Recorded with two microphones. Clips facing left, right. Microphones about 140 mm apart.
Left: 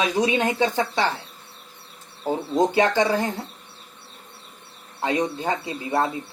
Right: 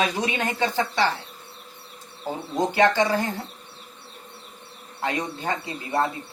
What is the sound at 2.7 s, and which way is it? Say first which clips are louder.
Speech: even; 20° left (ahead or behind).